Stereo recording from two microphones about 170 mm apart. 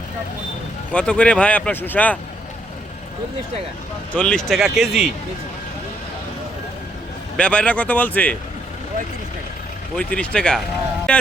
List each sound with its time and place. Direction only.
0.9 s speech: 5° left (ahead or behind)
4.1 s speech: 5° left (ahead or behind)
7.3 s speech: 5° left (ahead or behind)
9.9 s speech: 5° left (ahead or behind)